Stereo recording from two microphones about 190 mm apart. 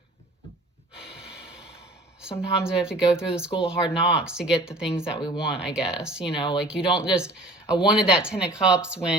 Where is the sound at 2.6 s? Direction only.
5° right (ahead or behind).